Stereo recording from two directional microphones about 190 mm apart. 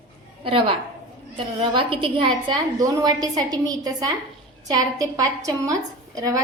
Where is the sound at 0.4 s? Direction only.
25° right (ahead or behind).